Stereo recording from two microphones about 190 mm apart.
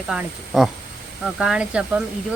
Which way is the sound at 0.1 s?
Centre (ahead or behind).